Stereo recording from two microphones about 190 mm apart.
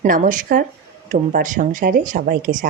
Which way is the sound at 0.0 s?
40° right (ahead or behind).